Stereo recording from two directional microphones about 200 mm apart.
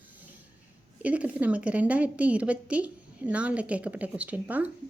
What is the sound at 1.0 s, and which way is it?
A woman's voice, 5° right (ahead or behind).